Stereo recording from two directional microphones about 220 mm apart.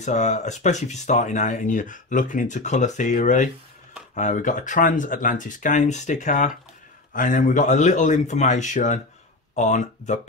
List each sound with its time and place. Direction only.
0.0 s speech: 30° left (ahead or behind)